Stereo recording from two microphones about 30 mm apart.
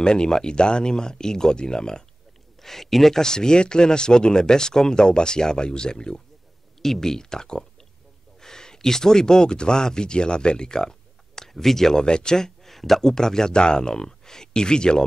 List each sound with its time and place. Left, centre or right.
0.0 s speech: left
2.6 s speech: centre
3.2 s speech: left
6.8 s speech: centre
12.0 s speech: left
12.6 s a sound: centre
13.1 s speech: centre